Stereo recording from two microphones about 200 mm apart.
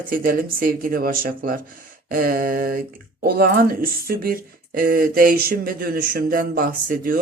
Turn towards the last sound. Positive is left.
turn(degrees=-45)  # may be behind; listen again after turning